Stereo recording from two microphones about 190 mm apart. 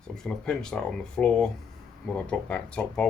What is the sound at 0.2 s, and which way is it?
Speech, 5° left (ahead or behind).